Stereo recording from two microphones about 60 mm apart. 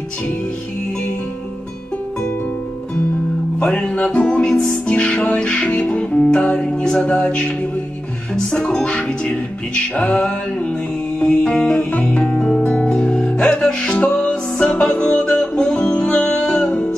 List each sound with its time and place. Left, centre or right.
3.5 s music: centre
12.3 s music: centre
12.6 s music: centre